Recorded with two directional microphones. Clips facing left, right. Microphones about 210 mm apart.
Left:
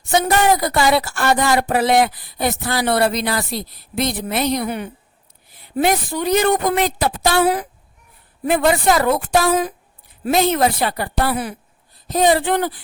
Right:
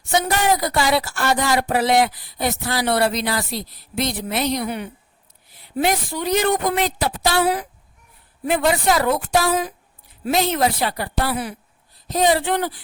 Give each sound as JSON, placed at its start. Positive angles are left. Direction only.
{"t": 0.0, "sound": "speech", "side_deg": 50}